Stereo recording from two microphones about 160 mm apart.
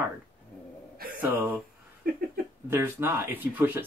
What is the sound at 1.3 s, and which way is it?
Speech, 15° right (ahead or behind).